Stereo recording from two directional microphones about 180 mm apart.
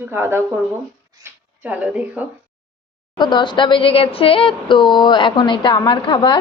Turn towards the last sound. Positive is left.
turn(degrees=25)  # may be behind; listen again after turning